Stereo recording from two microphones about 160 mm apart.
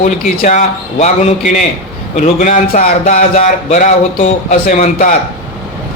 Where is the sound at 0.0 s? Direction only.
45° left (ahead or behind).